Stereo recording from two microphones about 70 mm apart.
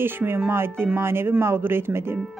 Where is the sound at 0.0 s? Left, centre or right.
Right.